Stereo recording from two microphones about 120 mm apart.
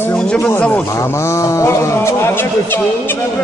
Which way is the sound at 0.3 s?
15° left (ahead or behind).